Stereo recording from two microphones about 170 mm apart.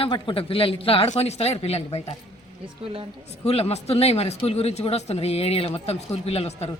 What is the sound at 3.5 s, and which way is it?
Speech, 35° left (ahead or behind).